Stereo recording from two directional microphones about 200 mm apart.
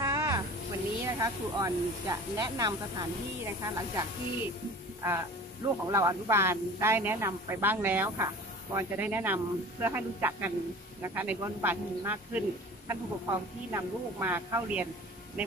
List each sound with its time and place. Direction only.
0.0 s snake: 15° right (ahead or behind)
1.0 s a man's voice: 15° right (ahead or behind)
5.9 s a man's voice: 15° right (ahead or behind)